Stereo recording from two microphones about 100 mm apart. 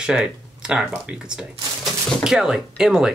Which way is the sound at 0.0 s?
10° right (ahead or behind).